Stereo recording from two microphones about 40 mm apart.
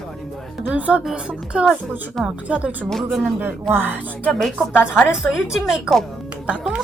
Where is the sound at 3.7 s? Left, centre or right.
Right.